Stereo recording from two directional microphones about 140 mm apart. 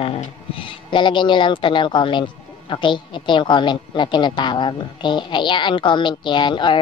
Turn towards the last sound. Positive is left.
turn(degrees=35)  # may be behind; listen again after turning